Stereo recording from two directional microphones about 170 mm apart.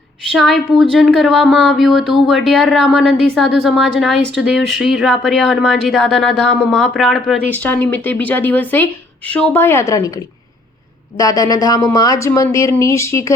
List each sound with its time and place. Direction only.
0.3 s speech: centre (ahead or behind)
7.5 s speech: 10° left (ahead or behind)